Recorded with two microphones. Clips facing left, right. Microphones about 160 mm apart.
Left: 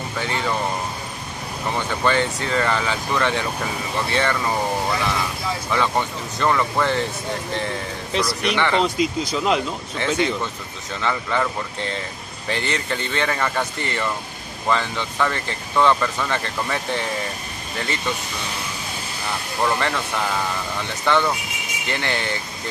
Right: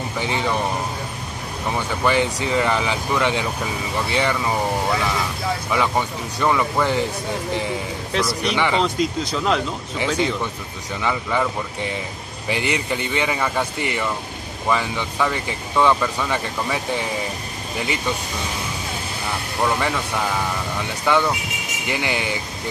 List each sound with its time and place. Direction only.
0.2 s speech: 15° right (ahead or behind)
1.7 s speech: 10° right (ahead or behind)
5.7 s speech: 10° right (ahead or behind)
8.1 s speech: centre (ahead or behind)
8.8 s speech: 5° left (ahead or behind)
9.9 s speech: 10° right (ahead or behind)
19.6 s speech: 5° right (ahead or behind)